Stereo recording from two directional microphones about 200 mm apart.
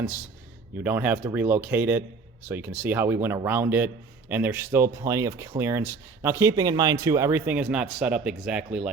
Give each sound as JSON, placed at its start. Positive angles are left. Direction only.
{"t": 0.8, "sound": "a man's voice", "side_deg": -10}